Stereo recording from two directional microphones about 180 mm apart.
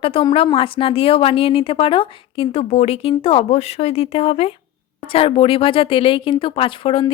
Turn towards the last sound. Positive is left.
turn(degrees=30)  # may be behind; listen again after turning